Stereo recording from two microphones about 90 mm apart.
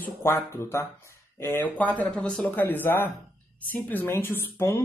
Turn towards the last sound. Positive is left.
turn(degrees=30)  # may be behind; listen again after turning